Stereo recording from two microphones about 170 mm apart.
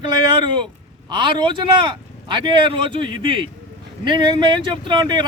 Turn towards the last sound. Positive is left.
turn(degrees=-25)  # may be behind; listen again after turning